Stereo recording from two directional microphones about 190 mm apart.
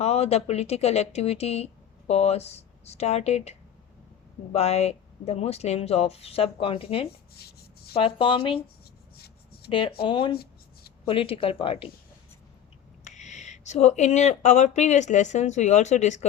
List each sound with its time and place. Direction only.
0.0 s speech: 35° left (ahead or behind)
4.5 s speech: 35° left (ahead or behind)
7.3 s rub: 55° left (ahead or behind)
7.9 s speech: 30° left (ahead or behind)
9.1 s a sound: 55° left (ahead or behind)
9.6 s speech: 25° left (ahead or behind)
10.3 s writing: 55° left (ahead or behind)
11.0 s speech: 30° left (ahead or behind)
13.1 s speech: 40° left (ahead or behind)